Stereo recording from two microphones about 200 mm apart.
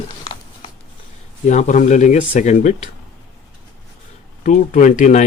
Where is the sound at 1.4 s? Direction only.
40° left (ahead or behind).